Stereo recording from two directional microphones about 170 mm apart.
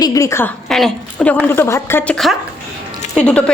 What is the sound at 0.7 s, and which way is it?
A woman's voice, 5° left (ahead or behind).